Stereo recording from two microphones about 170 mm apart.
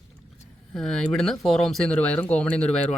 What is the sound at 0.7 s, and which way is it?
Speech, centre (ahead or behind).